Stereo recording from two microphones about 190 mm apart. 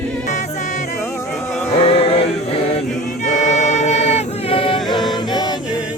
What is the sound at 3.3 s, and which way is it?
Choir, 40° left (ahead or behind).